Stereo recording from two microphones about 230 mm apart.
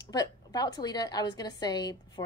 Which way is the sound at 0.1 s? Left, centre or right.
Centre.